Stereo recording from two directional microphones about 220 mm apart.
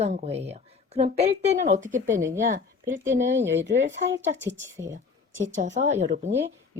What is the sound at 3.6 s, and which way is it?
Speech, 55° right (ahead or behind).